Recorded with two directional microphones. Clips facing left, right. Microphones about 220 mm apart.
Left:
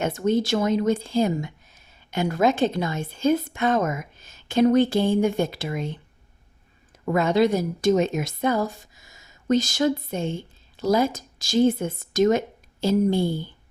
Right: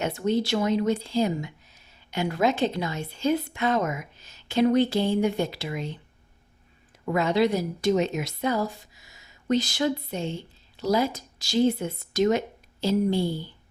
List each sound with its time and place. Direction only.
0.0 s speech: 45° left (ahead or behind)
7.0 s speech: 50° left (ahead or behind)